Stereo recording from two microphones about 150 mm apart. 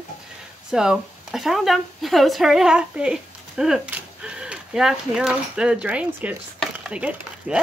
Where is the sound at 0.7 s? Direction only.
5° right (ahead or behind).